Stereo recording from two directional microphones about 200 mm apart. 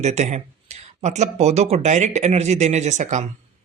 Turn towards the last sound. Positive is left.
turn(degrees=-35)  # may be behind; listen again after turning